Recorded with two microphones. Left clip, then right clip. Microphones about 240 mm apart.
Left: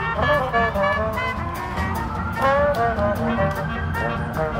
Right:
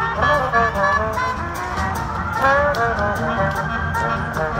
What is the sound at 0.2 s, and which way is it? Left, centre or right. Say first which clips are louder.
Music: right 3 dB; centre.